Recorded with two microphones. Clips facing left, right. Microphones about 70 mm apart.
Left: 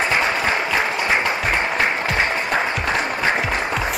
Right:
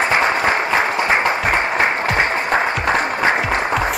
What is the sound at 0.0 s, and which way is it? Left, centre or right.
Applause, right.